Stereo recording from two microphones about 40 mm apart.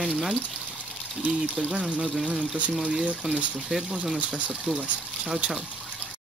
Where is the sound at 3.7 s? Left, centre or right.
Right.